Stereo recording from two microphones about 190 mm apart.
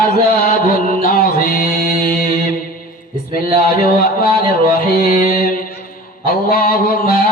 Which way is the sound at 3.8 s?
55° left (ahead or behind).